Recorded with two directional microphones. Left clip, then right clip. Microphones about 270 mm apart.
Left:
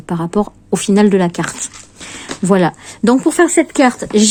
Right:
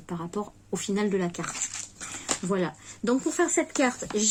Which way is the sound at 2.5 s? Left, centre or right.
Left.